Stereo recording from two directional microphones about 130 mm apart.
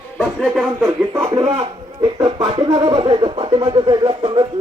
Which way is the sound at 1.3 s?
35° right (ahead or behind).